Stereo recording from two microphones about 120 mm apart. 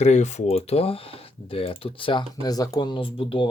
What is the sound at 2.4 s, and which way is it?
Speech, 30° left (ahead or behind).